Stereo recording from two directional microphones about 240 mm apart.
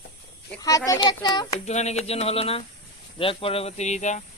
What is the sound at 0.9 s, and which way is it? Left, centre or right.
Speech, centre.